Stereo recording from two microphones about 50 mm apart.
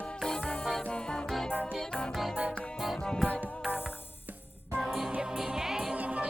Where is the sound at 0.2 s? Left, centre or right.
Centre.